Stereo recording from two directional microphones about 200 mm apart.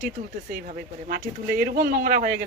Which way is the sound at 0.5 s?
40° right (ahead or behind).